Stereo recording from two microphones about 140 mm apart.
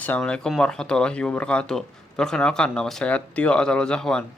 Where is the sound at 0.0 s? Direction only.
10° left (ahead or behind).